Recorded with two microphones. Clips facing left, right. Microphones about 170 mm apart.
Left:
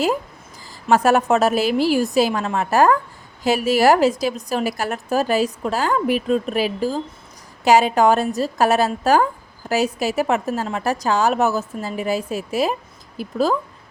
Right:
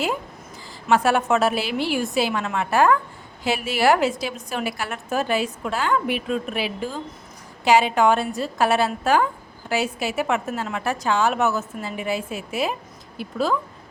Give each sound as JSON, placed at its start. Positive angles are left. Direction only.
{"t": 0.9, "sound": "a woman's voice", "side_deg": 40}